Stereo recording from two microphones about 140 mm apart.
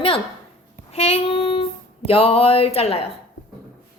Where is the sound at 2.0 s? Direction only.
45° left (ahead or behind).